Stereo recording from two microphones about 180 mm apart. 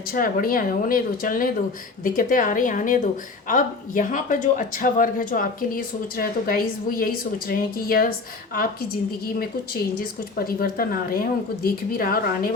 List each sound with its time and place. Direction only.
0.1 s speech: 50° left (ahead or behind)
10.0 s speech: 55° left (ahead or behind)